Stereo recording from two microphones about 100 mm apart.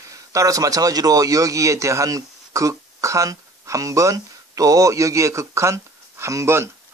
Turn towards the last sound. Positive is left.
turn(degrees=-30)  # may be behind; listen again after turning